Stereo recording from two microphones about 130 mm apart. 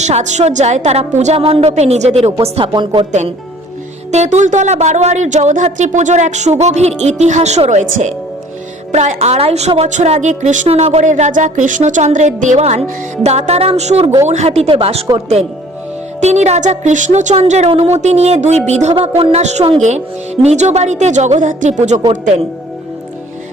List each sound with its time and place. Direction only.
0.0 s speech: 60° right (ahead or behind)
2.7 s a woman's voice: 40° right (ahead or behind)
3.1 s speech: 60° right (ahead or behind)
8.9 s speech: 60° right (ahead or behind)
10.7 s a woman's voice: 50° right (ahead or behind)
11.0 s a woman's voice: 80° right